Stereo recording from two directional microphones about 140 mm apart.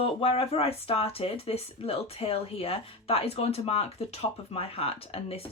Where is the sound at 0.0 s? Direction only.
45° left (ahead or behind).